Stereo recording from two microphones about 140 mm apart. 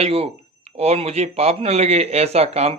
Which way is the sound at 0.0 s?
45° right (ahead or behind).